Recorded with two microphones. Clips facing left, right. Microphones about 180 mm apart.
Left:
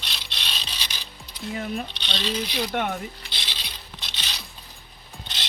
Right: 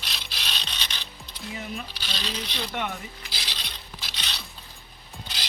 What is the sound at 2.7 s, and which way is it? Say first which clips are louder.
Speech: left 4 dB; 50° left (ahead or behind).